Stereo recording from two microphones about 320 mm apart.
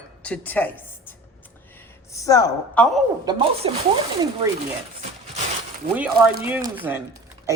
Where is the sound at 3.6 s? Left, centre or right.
Centre.